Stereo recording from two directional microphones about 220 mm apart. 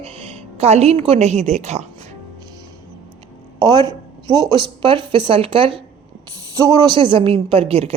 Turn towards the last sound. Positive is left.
turn(degrees=-25)  # may be behind; listen again after turning